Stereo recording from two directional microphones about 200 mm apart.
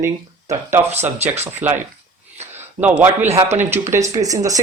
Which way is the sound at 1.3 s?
10° right (ahead or behind).